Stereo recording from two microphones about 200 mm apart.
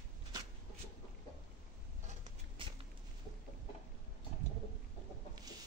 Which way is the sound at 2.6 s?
25° right (ahead or behind).